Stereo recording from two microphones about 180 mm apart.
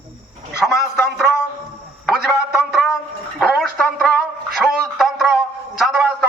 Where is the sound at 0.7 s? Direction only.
15° left (ahead or behind).